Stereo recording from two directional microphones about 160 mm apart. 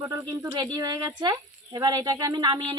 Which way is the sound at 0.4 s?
25° right (ahead or behind).